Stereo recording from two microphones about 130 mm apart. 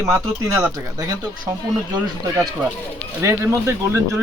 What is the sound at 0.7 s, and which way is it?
Speech, 25° right (ahead or behind).